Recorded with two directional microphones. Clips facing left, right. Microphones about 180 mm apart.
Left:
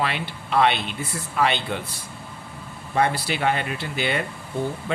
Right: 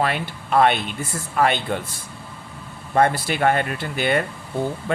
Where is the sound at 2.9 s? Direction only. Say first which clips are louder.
Right 4 dB; 50° right (ahead or behind).